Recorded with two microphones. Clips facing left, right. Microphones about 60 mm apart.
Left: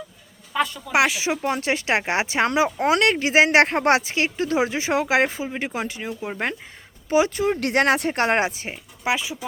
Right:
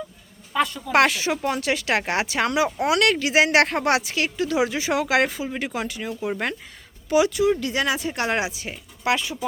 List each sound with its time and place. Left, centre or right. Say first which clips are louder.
0.5 s speech: right 1 dB; centre
1.5 s speech: left 1 dB; left
7.6 s speech: left 5 dB; left
8.2 s speech: left 4 dB; left
8.7 s speech: right 1 dB; centre